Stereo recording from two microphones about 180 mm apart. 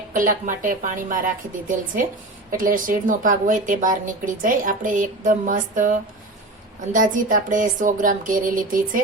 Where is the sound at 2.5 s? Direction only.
50° right (ahead or behind).